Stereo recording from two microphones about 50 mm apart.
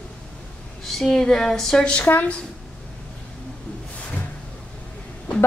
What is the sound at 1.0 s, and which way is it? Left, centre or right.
Speech, centre.